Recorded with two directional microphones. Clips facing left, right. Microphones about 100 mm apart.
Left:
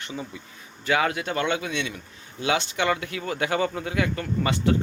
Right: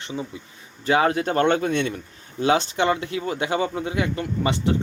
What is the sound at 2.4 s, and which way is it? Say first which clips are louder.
Speech: right 5 dB; 35° right (ahead or behind).